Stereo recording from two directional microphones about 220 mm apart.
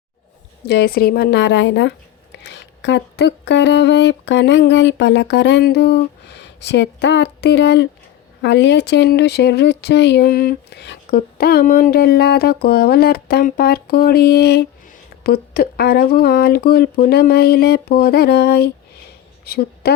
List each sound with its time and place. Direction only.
0.7 s a woman's voice: 45° left (ahead or behind)